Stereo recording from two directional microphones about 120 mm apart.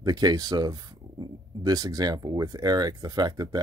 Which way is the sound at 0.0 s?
35° right (ahead or behind).